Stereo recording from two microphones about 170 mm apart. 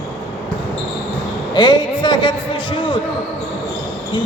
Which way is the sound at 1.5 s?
25° left (ahead or behind).